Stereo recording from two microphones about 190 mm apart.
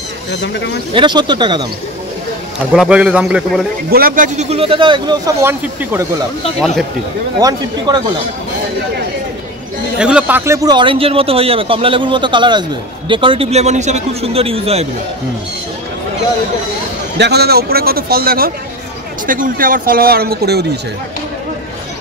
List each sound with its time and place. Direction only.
0.3 s speech: 65° left (ahead or behind)
0.9 s a man's voice: 25° right (ahead or behind)
2.7 s a man's voice: 5° right (ahead or behind)
3.9 s a man's voice: 50° right (ahead or behind); by 6.0 s 10° right (ahead or behind)
7.3 s a man's voice: 20° right (ahead or behind)
9.9 s a man's voice: 5° right (ahead or behind); by 14.9 s 30° right (ahead or behind)
17.2 s speech: 60° right (ahead or behind)